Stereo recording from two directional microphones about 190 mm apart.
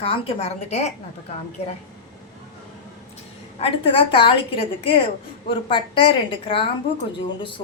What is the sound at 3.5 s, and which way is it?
A woman's voice, 30° left (ahead or behind).